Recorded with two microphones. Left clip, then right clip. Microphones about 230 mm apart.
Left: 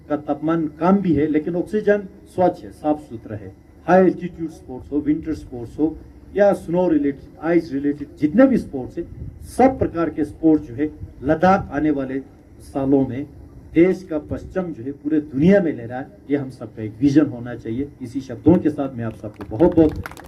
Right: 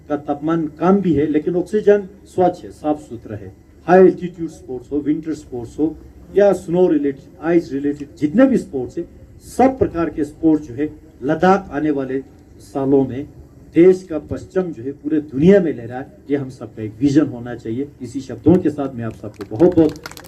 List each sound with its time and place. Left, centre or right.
0.1 s speech: right